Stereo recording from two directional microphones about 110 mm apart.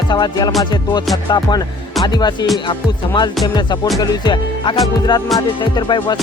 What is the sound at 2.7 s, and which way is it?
Speech, 45° left (ahead or behind).